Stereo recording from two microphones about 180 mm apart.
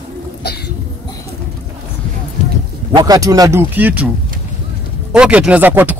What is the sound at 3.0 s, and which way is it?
Speech, 20° right (ahead or behind).